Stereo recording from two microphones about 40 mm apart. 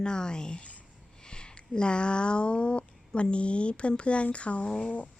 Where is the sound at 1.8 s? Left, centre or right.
Left.